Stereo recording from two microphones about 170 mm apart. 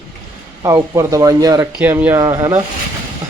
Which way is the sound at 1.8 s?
10° right (ahead or behind).